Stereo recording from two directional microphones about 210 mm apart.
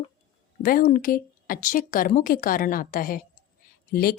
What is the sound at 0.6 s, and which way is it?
A woman's voice, 45° left (ahead or behind).